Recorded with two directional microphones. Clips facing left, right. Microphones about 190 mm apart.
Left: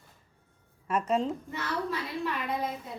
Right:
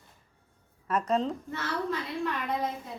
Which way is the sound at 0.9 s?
10° left (ahead or behind).